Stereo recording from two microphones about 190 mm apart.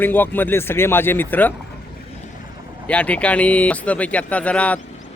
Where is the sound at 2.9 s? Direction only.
10° left (ahead or behind).